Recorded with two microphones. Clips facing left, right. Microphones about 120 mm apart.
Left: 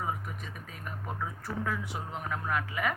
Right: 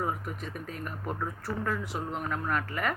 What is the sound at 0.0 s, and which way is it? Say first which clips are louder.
Speech: right 3 dB; centre (ahead or behind).